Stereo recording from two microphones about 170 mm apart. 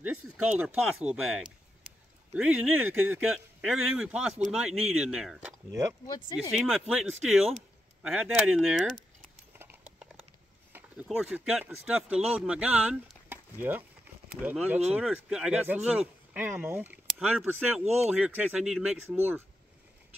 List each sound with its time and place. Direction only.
0.0 s speech: 10° right (ahead or behind)
2.3 s speech: 5° right (ahead or behind)
5.7 s speech: 15° right (ahead or behind)
6.0 s speech: 25° left (ahead or behind)
6.5 s speech: 5° right (ahead or behind)
9.5 s clip-clop: 10° right (ahead or behind)
10.7 s speech: 5° right (ahead or behind)